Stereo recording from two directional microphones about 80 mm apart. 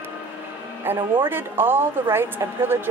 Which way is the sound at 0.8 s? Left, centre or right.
Right.